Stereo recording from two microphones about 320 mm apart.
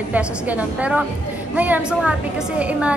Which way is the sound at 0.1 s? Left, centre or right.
Centre.